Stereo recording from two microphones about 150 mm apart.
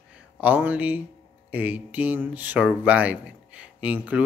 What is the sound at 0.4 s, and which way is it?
Speech, 10° right (ahead or behind).